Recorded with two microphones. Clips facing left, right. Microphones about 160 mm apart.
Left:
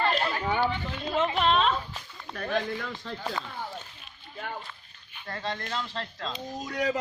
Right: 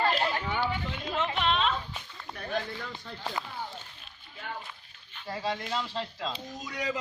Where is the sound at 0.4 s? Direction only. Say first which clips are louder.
Left 4 dB; 45° left (ahead or behind).